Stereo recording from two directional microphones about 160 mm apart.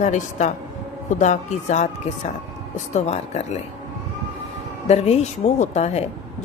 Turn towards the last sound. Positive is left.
turn(degrees=45)  # may be behind; listen again after turning